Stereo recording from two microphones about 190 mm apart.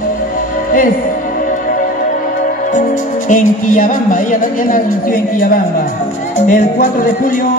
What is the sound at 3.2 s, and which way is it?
Music, 45° left (ahead or behind).